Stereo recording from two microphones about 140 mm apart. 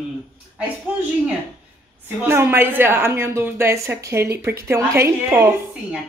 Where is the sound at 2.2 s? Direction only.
15° right (ahead or behind).